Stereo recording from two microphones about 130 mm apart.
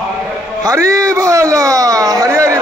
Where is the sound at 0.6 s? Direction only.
20° right (ahead or behind).